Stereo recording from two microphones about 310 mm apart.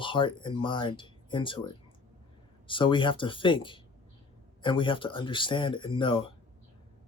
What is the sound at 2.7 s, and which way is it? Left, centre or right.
Speech, centre.